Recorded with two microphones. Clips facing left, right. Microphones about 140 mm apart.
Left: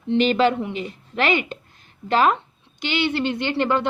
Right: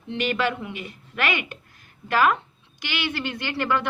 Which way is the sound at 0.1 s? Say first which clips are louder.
Left 7 dB; 30° left (ahead or behind).